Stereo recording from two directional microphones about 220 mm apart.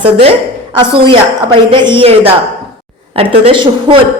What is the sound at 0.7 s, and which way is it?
A woman's voice, 20° right (ahead or behind).